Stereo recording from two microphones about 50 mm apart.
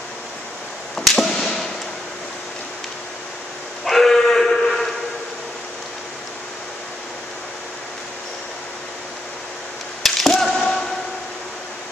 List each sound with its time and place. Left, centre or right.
0.9 s arrow: centre
1.4 s fireworks: centre
3.8 s sheep: centre
10.0 s arrow: centre
10.6 s a sound: centre